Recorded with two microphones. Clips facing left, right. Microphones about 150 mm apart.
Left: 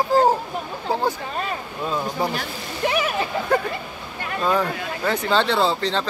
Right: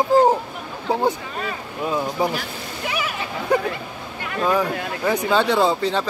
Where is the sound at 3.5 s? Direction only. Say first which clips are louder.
Right 4 dB; 10° right (ahead or behind).